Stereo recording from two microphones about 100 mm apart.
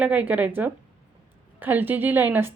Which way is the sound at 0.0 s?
15° right (ahead or behind).